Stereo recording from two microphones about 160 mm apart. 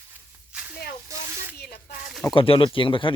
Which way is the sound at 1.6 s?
75° left (ahead or behind).